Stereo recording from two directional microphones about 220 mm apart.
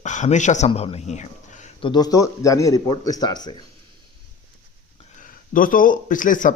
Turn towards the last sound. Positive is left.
turn(degrees=35)  # may be behind; listen again after turning